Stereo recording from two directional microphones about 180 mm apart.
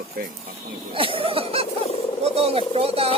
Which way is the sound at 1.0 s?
30° right (ahead or behind).